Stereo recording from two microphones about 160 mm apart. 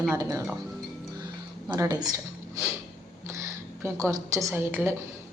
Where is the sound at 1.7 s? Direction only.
20° right (ahead or behind).